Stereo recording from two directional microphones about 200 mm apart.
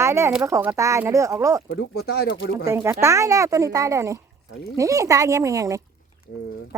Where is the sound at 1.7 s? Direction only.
55° left (ahead or behind).